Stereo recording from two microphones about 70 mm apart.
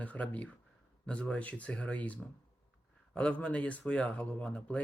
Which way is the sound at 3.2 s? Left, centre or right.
Centre.